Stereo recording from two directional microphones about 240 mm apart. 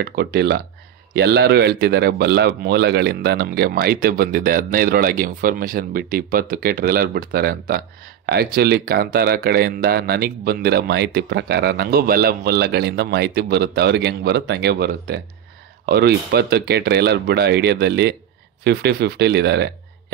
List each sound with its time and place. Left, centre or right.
0.0 s speech: right